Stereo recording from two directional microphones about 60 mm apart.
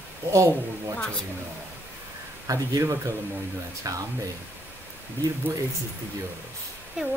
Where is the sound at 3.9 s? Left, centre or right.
Right.